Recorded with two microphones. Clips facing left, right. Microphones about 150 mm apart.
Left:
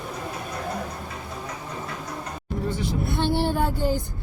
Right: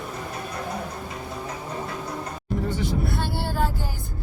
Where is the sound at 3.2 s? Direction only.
20° left (ahead or behind).